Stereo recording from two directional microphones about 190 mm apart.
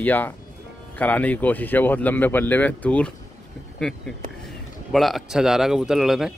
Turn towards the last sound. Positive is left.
turn(degrees=0)  # may be behind; listen again after turning